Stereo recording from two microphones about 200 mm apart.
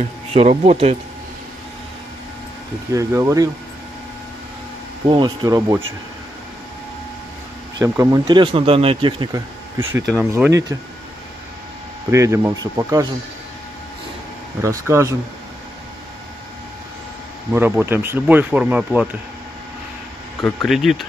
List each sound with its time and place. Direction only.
0.3 s speech: 30° right (ahead or behind)
2.9 s speech: 15° right (ahead or behind)
5.0 s speech: 25° right (ahead or behind)
7.8 s speech: 15° right (ahead or behind)
12.1 s speech: 15° right (ahead or behind)
14.6 s speech: 15° right (ahead or behind)
17.5 s speech: 10° right (ahead or behind)
20.3 s speech: centre (ahead or behind)